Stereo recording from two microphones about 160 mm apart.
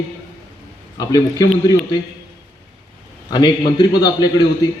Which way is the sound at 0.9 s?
25° left (ahead or behind).